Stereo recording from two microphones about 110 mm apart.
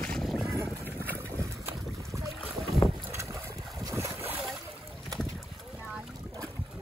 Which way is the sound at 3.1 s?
30° right (ahead or behind).